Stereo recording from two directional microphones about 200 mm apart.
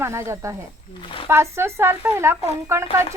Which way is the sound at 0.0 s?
15° right (ahead or behind).